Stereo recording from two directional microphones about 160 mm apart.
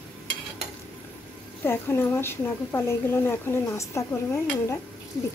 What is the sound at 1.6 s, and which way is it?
A woman's voice, 15° left (ahead or behind).